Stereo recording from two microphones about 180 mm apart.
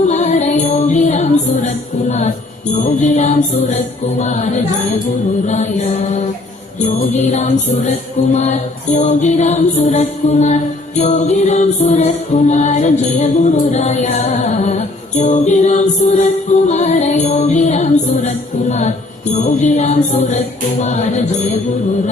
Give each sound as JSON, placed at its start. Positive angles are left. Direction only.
{"t": 0.1, "sound": "music", "side_deg": 40}
{"t": 6.8, "sound": "music", "side_deg": 40}